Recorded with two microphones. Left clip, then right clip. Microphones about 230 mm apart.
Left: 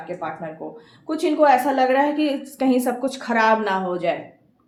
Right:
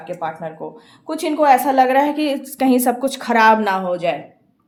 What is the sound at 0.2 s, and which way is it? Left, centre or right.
Speech, right.